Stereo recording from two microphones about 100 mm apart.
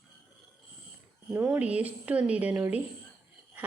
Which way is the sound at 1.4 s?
10° right (ahead or behind).